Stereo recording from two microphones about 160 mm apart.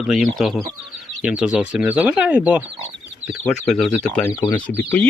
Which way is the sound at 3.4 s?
5° left (ahead or behind).